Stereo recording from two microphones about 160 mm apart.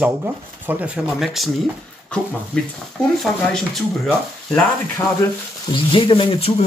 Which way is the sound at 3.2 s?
Centre (ahead or behind).